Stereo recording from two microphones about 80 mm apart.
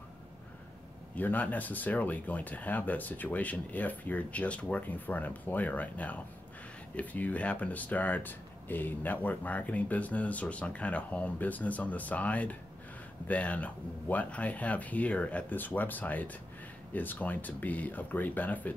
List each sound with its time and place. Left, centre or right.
1.1 s speech: left